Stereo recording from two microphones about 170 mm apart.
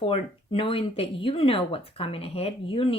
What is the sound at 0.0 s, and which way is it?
Speech, 30° left (ahead or behind).